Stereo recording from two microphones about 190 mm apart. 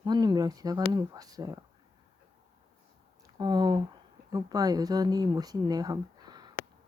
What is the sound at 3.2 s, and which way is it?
Speech, 20° right (ahead or behind).